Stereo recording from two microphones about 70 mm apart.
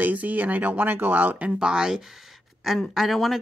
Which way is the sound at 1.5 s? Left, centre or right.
Centre.